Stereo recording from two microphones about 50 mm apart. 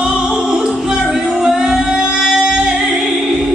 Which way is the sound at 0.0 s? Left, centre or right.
Centre.